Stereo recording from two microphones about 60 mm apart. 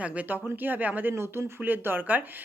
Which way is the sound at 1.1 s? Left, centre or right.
Right.